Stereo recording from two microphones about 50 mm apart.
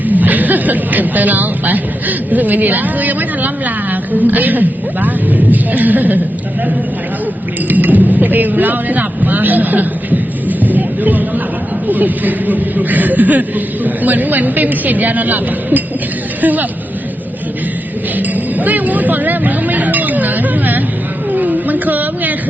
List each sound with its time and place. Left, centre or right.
0.0 s a woman's voice: right
7.7 s speech: right
18.2 s music: right
21.3 s a sound: right